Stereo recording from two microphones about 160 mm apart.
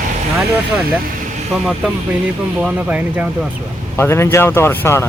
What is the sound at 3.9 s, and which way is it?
Speech, 15° left (ahead or behind).